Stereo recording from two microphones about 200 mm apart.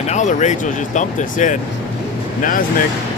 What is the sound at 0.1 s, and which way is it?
Speech, 35° left (ahead or behind).